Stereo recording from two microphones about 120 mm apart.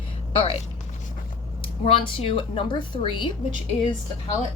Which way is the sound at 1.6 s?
50° left (ahead or behind).